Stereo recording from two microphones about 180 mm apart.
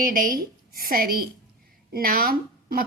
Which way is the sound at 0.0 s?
50° right (ahead or behind).